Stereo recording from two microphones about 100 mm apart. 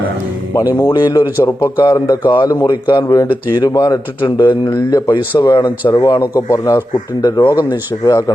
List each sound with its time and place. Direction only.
0.7 s speech: 40° left (ahead or behind)
3.0 s speech: 35° left (ahead or behind)